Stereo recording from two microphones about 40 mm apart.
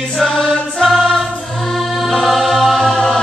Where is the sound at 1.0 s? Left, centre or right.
Centre.